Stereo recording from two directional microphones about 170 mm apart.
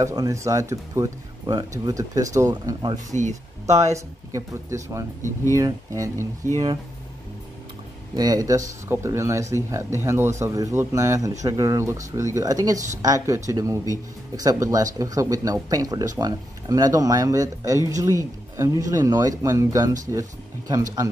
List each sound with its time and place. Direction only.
0.0 s speech: 20° right (ahead or behind)
3.1 s speech: 45° right (ahead or behind)
3.9 s speech: 20° right (ahead or behind)
8.2 s speech: 20° right (ahead or behind)